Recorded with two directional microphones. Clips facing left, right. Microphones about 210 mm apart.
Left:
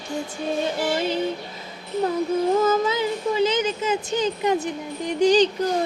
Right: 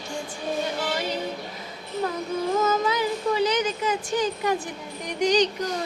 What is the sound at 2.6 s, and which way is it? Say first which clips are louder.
Speech: left 3 dB; 25° left (ahead or behind).